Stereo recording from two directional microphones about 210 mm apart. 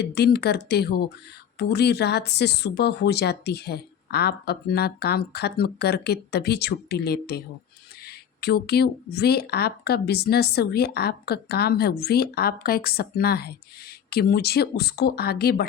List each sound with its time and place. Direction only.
0.0 s speech: 50° left (ahead or behind)